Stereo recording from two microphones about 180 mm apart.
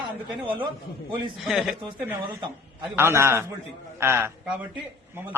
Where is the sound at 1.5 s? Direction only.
5° right (ahead or behind).